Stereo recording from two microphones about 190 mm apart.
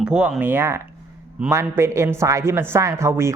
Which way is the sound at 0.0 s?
5° right (ahead or behind).